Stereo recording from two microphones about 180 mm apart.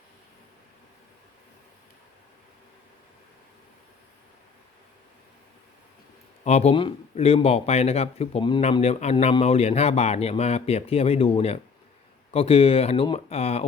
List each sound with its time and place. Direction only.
6.4 s a man's voice: 35° left (ahead or behind)